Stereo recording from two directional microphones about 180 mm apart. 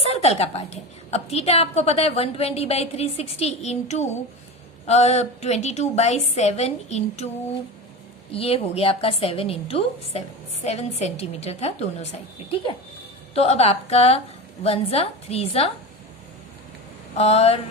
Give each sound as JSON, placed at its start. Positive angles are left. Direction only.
{"t": 0.1, "sound": "a woman's voice", "side_deg": 35}
{"t": 8.3, "sound": "a woman's voice", "side_deg": 35}
{"t": 13.3, "sound": "a woman's voice", "side_deg": 35}
{"t": 17.2, "sound": "a woman's voice", "side_deg": 35}